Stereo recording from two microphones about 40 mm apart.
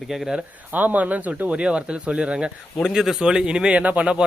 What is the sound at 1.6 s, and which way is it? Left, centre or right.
Speech, right.